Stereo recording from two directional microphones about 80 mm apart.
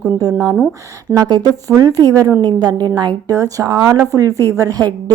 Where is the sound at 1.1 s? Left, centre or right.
Right.